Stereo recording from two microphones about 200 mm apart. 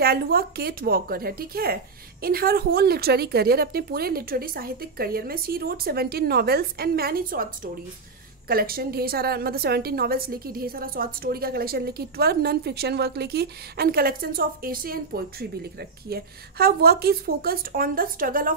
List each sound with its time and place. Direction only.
0.0 s a woman's voice: 50° right (ahead or behind)